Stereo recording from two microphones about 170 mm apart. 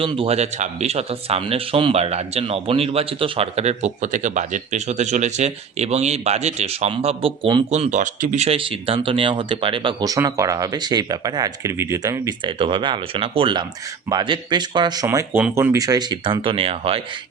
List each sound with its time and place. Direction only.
0.0 s speech: 30° right (ahead or behind)